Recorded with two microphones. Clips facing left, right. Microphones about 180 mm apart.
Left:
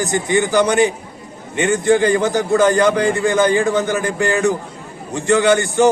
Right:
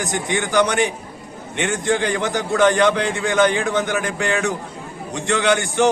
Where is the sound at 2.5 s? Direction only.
Centre (ahead or behind).